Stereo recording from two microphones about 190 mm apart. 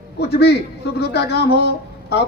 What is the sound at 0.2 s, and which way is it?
A man's voice, 60° left (ahead or behind).